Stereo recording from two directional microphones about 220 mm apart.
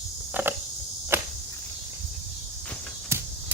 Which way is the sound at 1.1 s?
10° right (ahead or behind).